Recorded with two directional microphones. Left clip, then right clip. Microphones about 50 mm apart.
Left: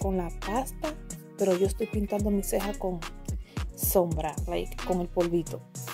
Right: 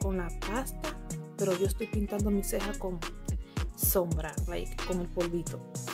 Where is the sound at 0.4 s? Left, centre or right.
Centre.